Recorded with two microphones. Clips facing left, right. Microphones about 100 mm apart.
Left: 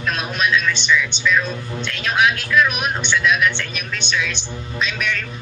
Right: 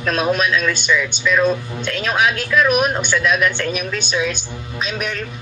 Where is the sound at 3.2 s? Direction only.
Centre (ahead or behind).